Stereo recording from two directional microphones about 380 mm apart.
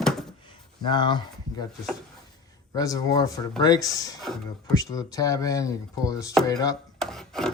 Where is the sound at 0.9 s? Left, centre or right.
Centre.